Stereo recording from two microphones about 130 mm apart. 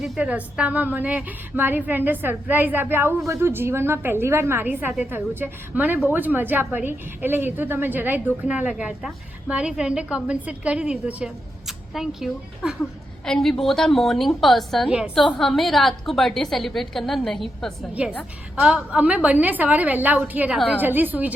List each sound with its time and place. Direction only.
0.0 s a woman's voice: 10° right (ahead or behind)
18.0 s a woman's voice: 10° right (ahead or behind)